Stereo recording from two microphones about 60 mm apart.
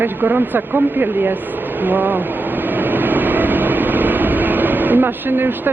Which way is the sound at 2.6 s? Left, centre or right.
Right.